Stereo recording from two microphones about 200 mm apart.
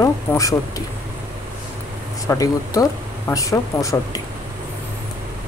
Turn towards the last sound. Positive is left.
turn(degrees=15)  # may be behind; listen again after turning